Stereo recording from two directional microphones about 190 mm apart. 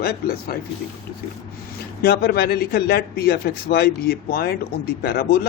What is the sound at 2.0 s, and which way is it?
A man's voice, 55° left (ahead or behind).